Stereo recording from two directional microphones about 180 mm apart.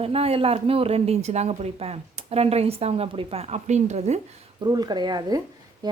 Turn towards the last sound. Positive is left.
turn(degrees=-20)  # may be behind; listen again after turning